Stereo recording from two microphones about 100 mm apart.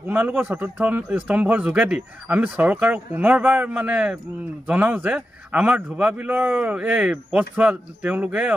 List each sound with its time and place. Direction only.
0.0 s speech: 20° right (ahead or behind)